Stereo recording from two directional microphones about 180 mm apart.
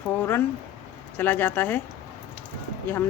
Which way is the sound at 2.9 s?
10° left (ahead or behind).